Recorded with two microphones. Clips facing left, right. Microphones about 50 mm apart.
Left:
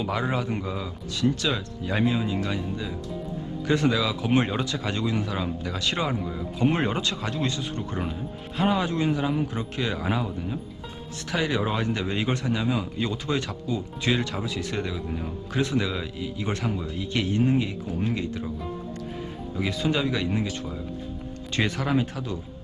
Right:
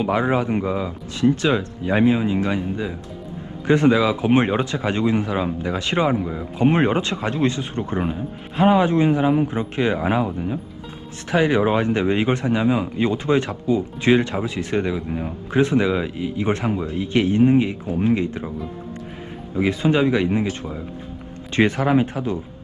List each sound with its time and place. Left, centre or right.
0.0 s speech: right
19.5 s speech: right